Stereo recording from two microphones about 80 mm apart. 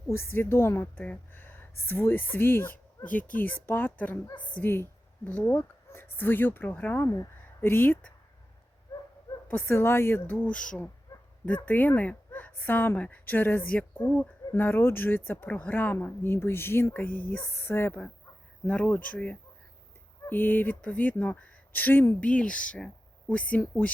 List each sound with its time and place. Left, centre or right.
0.1 s speech: left
8.9 s dog: left
9.5 s speech: left
11.1 s bow-wow: left
11.4 s speech: left